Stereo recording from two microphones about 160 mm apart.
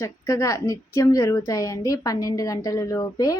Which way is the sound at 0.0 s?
20° left (ahead or behind).